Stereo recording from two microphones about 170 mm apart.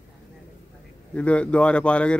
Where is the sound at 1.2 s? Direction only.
5° left (ahead or behind).